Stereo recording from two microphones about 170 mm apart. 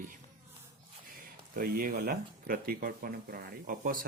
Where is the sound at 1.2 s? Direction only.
55° right (ahead or behind).